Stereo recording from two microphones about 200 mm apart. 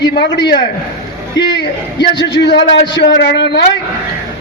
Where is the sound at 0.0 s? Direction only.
60° left (ahead or behind).